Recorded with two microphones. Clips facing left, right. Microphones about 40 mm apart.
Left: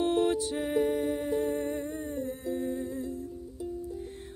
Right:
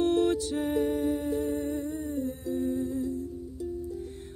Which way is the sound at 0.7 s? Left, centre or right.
Left.